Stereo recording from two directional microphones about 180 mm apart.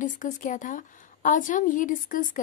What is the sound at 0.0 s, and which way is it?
A woman's voice, 45° left (ahead or behind).